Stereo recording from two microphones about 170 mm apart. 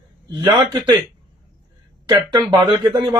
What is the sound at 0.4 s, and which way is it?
Speech, 25° right (ahead or behind).